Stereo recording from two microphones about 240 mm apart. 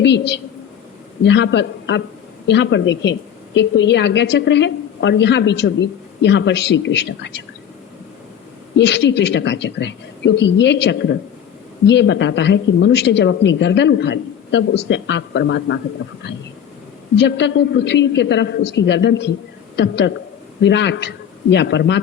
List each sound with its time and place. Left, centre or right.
0.0 s a woman's voice: left
8.7 s a woman's voice: left
17.2 s a woman's voice: left